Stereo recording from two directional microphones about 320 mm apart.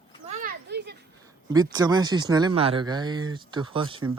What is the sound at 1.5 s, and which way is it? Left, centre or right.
Speech, centre.